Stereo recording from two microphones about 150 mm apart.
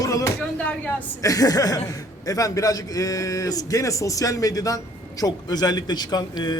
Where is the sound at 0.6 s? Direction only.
10° left (ahead or behind).